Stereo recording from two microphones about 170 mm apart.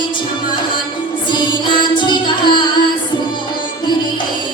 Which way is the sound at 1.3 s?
25° left (ahead or behind).